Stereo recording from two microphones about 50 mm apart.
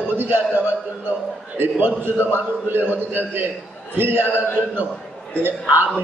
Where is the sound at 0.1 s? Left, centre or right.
Right.